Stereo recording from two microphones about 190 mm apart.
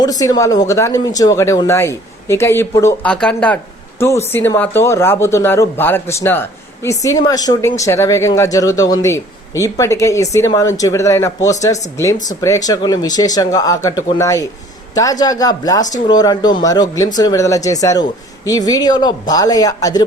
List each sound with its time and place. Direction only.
0.0 s speech: 20° left (ahead or behind)